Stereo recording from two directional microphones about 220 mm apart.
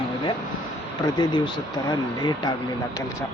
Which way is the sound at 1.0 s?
20° left (ahead or behind).